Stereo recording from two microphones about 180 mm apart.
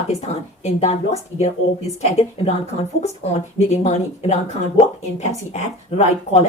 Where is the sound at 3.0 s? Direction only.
40° left (ahead or behind).